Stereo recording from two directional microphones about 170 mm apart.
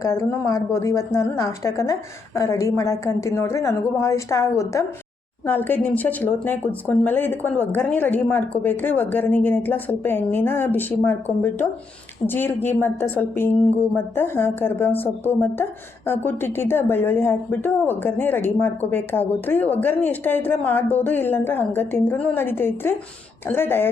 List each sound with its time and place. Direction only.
0.0 s speech: 15° left (ahead or behind)